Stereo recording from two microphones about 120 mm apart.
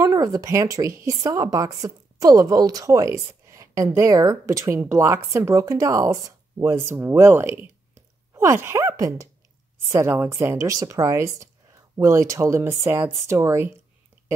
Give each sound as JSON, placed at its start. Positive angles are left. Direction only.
{"t": 0.0, "sound": "speech", "side_deg": -30}